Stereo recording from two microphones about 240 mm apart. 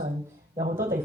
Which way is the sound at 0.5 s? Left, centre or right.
Centre.